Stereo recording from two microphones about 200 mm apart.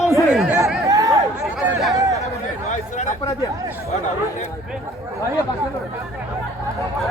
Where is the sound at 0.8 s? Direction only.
15° right (ahead or behind).